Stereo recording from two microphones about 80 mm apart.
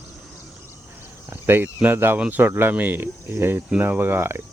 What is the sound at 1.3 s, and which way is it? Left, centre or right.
Speech, right.